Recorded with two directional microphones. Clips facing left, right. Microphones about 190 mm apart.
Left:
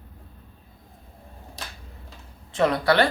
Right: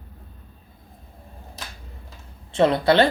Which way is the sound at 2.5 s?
25° right (ahead or behind).